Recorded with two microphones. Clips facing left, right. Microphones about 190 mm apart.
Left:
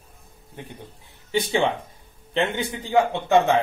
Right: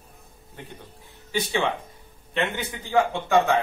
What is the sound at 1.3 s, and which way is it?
Speech, 30° left (ahead or behind).